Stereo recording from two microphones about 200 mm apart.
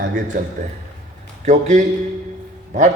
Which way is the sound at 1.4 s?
35° right (ahead or behind).